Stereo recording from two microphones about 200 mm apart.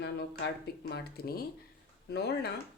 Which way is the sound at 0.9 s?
50° left (ahead or behind).